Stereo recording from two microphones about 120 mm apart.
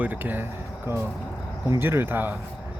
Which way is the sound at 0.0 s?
15° right (ahead or behind).